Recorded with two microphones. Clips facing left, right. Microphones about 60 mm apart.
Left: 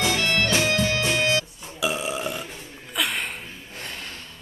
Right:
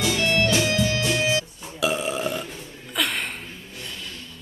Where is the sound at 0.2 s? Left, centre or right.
Left.